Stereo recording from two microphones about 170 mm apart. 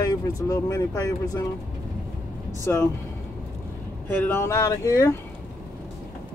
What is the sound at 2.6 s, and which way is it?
Speech, 15° left (ahead or behind).